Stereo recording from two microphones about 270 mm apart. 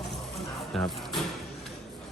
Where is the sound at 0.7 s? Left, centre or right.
Centre.